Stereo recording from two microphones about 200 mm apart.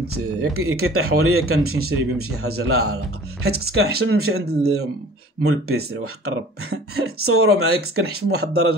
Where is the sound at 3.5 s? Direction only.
50° right (ahead or behind).